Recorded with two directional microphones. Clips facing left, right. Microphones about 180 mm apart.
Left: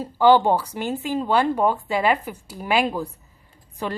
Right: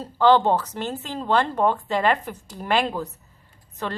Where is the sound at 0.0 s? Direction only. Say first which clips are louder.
Left 2 dB; 10° left (ahead or behind).